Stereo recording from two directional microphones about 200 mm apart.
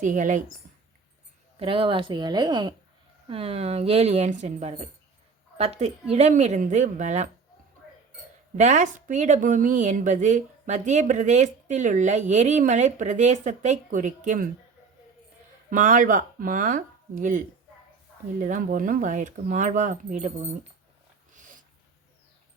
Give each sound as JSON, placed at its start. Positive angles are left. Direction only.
{"t": 0.0, "sound": "speech", "side_deg": -40}
{"t": 1.5, "sound": "speech", "side_deg": -25}
{"t": 8.5, "sound": "speech", "side_deg": -40}
{"t": 15.7, "sound": "speech", "side_deg": -40}
{"t": 21.3, "sound": "dog", "side_deg": -40}